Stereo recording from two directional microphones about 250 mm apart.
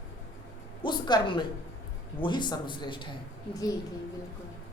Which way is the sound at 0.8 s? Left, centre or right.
Centre.